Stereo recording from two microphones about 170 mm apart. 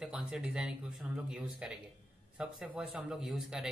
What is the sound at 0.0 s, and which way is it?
Speech, 5° right (ahead or behind).